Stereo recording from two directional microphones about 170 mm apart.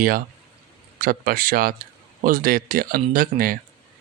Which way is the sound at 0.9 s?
55° right (ahead or behind).